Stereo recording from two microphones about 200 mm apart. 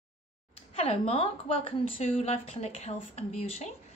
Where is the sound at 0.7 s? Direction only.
30° left (ahead or behind).